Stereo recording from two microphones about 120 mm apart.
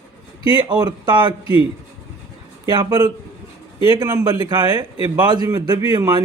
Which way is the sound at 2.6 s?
35° right (ahead or behind).